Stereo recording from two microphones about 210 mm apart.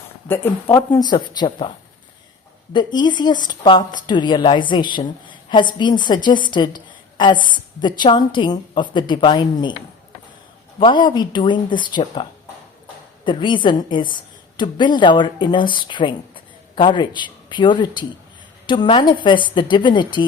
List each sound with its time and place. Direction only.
0.3 s a woman's voice: 10° left (ahead or behind)
2.7 s a woman's voice: 20° left (ahead or behind)
10.8 s a woman's voice: 25° left (ahead or behind)
13.2 s a woman's voice: 25° left (ahead or behind)